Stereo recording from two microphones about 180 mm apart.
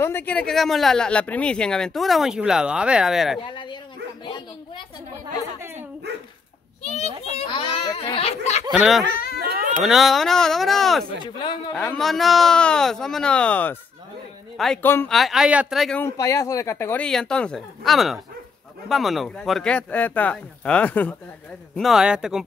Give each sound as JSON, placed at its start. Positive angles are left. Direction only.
{"t": 0.0, "sound": "speech", "side_deg": 10}
{"t": 3.3, "sound": "bow-wow", "side_deg": 25}
{"t": 6.8, "sound": "children playing", "side_deg": 35}
{"t": 8.7, "sound": "speech", "side_deg": 0}
{"t": 9.4, "sound": "cat", "side_deg": -50}
{"t": 9.8, "sound": "a man's voice", "side_deg": 0}
{"t": 15.1, "sound": "speech", "side_deg": 0}
{"t": 16.0, "sound": "speech", "side_deg": 20}